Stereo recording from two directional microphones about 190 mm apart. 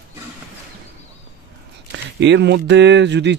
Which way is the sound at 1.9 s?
70° right (ahead or behind).